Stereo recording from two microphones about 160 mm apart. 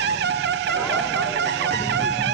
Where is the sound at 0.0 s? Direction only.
90° right.